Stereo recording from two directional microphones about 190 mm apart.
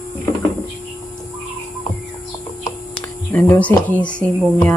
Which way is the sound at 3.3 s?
10° left (ahead or behind).